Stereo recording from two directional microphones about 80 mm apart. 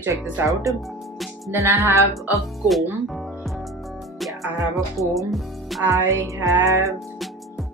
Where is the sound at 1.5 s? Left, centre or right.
Right.